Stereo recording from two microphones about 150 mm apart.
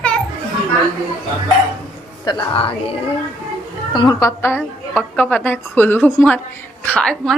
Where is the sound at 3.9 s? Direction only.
25° left (ahead or behind).